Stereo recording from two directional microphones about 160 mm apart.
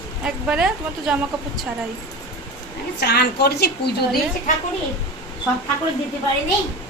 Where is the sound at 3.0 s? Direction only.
90° left.